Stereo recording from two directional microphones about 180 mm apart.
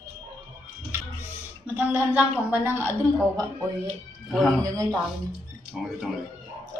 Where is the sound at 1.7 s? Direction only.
10° right (ahead or behind).